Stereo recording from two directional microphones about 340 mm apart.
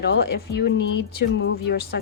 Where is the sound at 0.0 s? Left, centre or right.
Left.